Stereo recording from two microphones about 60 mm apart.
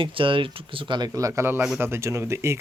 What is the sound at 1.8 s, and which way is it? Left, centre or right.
Speech, right.